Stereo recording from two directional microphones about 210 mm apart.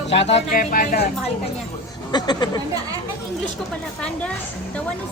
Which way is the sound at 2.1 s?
20° left (ahead or behind).